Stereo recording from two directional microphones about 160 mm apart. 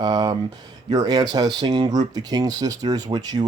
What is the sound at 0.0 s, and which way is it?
Speech, 25° right (ahead or behind).